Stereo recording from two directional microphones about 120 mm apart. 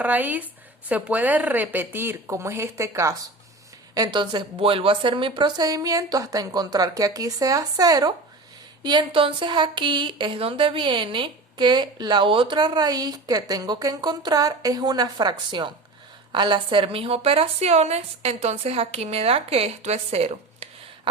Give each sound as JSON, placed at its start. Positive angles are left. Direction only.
{"t": 0.0, "sound": "a woman's voice", "side_deg": -15}
{"t": 3.9, "sound": "a woman's voice", "side_deg": -35}